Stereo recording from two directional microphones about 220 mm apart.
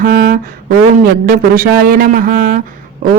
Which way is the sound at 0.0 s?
40° right (ahead or behind).